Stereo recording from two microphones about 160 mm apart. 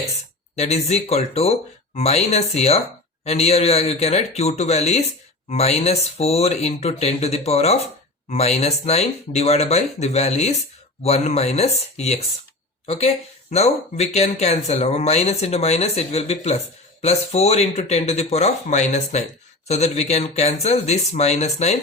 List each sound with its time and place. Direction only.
0.5 s speech: 40° left (ahead or behind)